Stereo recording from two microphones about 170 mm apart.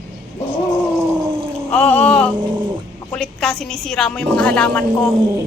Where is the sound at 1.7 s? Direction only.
10° left (ahead or behind).